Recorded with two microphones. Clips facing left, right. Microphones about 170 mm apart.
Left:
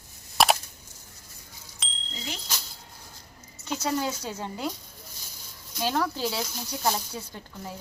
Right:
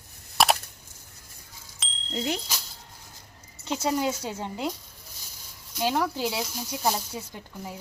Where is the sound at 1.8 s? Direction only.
Centre (ahead or behind).